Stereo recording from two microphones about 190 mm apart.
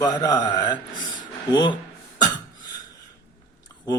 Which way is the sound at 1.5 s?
20° left (ahead or behind).